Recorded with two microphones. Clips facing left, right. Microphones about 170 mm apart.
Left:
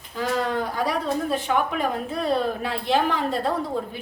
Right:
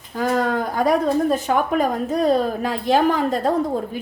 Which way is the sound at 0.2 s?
45° right (ahead or behind).